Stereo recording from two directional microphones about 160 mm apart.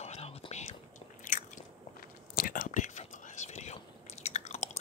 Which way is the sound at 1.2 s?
55° left (ahead or behind).